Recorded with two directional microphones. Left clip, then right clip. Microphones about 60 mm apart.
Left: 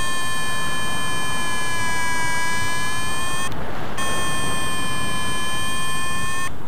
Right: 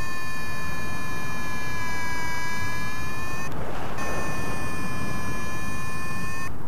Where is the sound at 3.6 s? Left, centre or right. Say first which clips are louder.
Left 3 dB; right.